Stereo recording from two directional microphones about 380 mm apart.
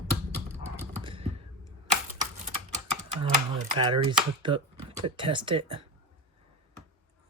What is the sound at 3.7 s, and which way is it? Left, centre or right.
Speech, centre.